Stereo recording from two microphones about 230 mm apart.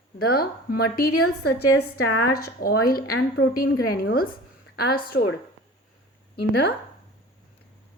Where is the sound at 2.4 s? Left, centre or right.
Left.